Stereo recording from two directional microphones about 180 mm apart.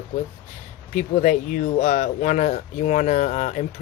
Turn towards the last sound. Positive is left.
turn(degrees=45)  # may be behind; listen again after turning